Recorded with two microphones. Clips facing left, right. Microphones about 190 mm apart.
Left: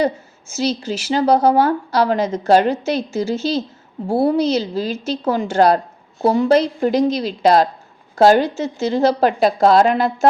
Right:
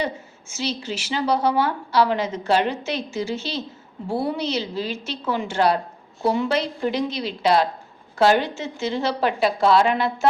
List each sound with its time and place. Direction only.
0.0 s a woman's voice: 40° left (ahead or behind)